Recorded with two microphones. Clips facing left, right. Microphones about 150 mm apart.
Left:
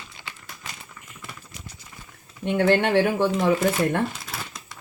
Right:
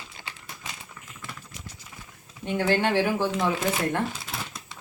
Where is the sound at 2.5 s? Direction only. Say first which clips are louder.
Left 4 dB; 60° left (ahead or behind).